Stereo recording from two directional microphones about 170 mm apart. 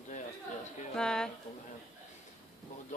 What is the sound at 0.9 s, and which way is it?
Speech, 5° left (ahead or behind).